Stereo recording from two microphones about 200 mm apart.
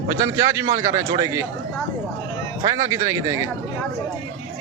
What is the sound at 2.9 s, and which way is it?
Speech, 15° right (ahead or behind).